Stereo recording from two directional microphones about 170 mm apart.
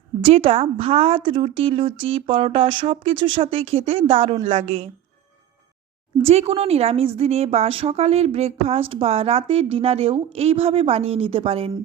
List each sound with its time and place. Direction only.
0.2 s a woman's voice: 35° right (ahead or behind)
6.2 s a woman's voice: 35° right (ahead or behind)